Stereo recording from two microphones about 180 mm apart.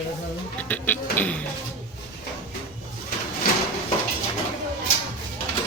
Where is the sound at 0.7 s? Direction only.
10° left (ahead or behind).